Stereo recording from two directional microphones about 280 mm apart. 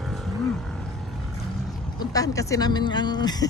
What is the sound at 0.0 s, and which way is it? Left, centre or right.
Wild animals, centre.